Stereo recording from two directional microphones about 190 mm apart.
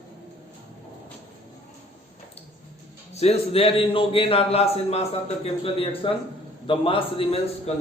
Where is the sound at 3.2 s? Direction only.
30° left (ahead or behind).